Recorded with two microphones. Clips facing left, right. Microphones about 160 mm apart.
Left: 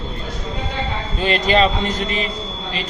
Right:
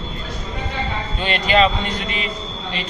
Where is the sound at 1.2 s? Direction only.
35° left (ahead or behind).